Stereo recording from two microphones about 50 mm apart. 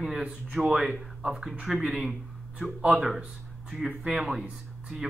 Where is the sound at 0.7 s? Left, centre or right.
Centre.